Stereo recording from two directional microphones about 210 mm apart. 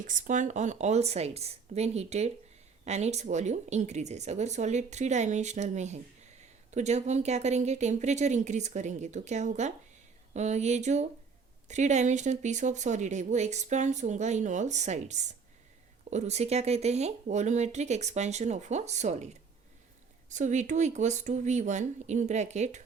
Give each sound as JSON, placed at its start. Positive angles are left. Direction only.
{"t": 0.1, "sound": "speech", "side_deg": -35}
{"t": 20.3, "sound": "speech", "side_deg": -35}